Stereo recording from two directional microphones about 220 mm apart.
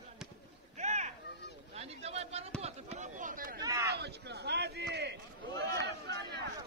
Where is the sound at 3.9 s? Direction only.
50° right (ahead or behind).